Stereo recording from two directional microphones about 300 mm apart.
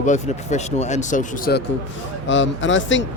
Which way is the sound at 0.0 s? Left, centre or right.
Left.